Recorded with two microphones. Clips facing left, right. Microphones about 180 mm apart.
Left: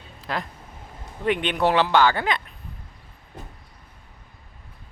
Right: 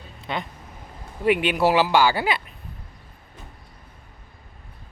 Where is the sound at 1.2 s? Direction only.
10° right (ahead or behind).